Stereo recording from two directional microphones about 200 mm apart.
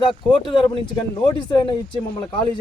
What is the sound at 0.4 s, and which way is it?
Speech, 25° left (ahead or behind).